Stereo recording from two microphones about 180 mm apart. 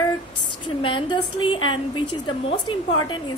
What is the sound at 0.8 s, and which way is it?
A woman's voice, 25° left (ahead or behind).